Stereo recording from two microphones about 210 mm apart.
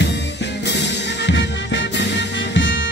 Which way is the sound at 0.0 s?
55° left (ahead or behind).